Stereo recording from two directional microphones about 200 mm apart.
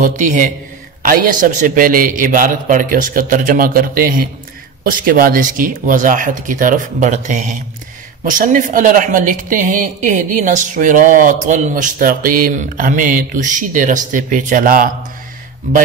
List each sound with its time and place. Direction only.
0.0 s a man's voice: 40° right (ahead or behind)